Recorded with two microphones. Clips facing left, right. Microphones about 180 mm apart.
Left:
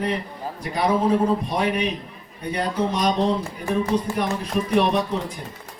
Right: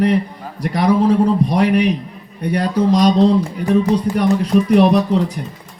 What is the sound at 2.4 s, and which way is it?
Speech, 70° right (ahead or behind).